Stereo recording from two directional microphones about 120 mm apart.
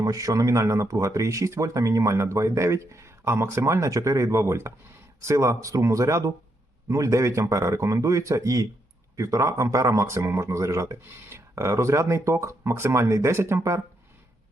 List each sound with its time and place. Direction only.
0.0 s speech: 30° right (ahead or behind)